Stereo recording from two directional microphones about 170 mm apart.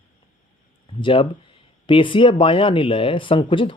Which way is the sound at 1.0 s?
30° left (ahead or behind).